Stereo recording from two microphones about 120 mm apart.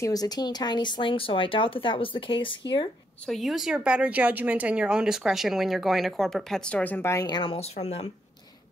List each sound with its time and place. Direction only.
0.0 s speech: 30° left (ahead or behind)
3.3 s speech: centre (ahead or behind); by 7.2 s 20° left (ahead or behind)
7.2 s speech: 40° left (ahead or behind)
7.5 s speech: 65° left (ahead or behind)